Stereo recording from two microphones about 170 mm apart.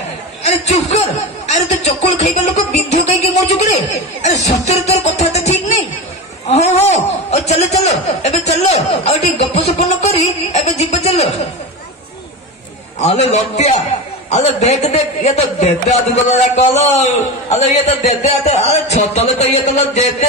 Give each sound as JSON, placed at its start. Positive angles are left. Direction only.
{"t": 0.4, "sound": "a sound", "side_deg": 40}
{"t": 3.5, "sound": "music", "side_deg": 40}
{"t": 6.4, "sound": "a man's voice", "side_deg": 40}
{"t": 13.0, "sound": "a man's voice", "side_deg": 40}